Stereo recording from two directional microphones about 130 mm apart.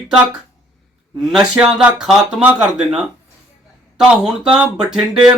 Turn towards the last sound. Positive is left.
turn(degrees=-5)  # may be behind; listen again after turning